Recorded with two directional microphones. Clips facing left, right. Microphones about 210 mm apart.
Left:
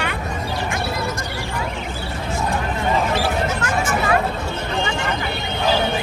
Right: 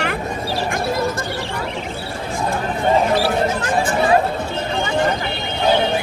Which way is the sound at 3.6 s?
30° right (ahead or behind).